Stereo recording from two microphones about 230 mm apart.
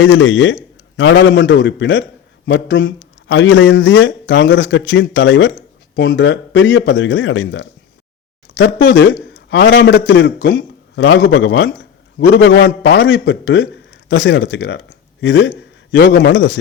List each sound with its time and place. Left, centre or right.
0.0 s a man's voice: left